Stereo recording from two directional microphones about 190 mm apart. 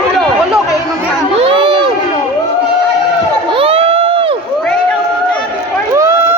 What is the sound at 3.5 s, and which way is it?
Crowd, 30° right (ahead or behind).